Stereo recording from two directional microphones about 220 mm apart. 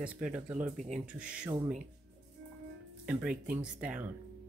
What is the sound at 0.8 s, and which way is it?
Speech, 30° right (ahead or behind).